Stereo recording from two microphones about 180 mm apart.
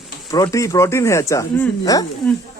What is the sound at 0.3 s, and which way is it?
Speech, 20° left (ahead or behind).